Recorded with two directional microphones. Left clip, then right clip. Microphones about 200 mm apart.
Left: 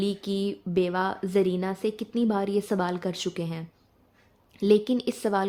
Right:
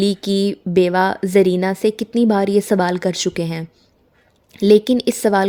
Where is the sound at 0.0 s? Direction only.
45° right (ahead or behind).